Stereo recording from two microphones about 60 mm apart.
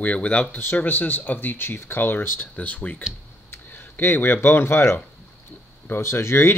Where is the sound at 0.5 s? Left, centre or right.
Left.